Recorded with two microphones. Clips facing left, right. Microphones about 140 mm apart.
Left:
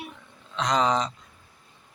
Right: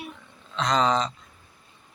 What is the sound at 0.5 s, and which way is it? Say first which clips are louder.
Speech: right 1 dB; 15° left (ahead or behind).